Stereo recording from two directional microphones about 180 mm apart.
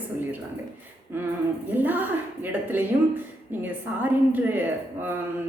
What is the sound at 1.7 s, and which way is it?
A woman's voice, 10° right (ahead or behind).